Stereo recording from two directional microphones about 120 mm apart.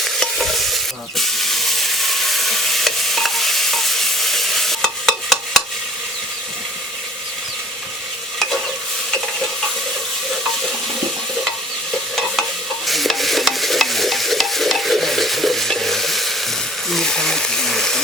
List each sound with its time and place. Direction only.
0.0 s stir: centre (ahead or behind)
12.4 s stir: centre (ahead or behind)
16.9 s a sound: 5° left (ahead or behind)